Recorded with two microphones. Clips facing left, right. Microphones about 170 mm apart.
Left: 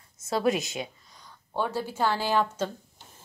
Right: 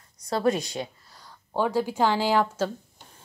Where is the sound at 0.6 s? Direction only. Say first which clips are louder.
Right 2 dB; centre (ahead or behind).